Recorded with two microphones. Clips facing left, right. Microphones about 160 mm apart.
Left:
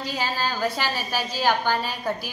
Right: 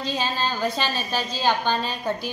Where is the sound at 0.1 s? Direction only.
20° right (ahead or behind).